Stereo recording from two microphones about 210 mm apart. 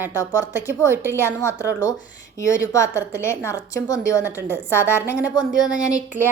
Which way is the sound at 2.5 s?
15° left (ahead or behind).